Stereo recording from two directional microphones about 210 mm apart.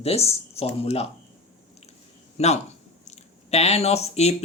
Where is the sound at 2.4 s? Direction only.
30° left (ahead or behind).